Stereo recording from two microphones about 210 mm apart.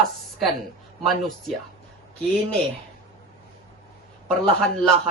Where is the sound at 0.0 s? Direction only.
Centre (ahead or behind).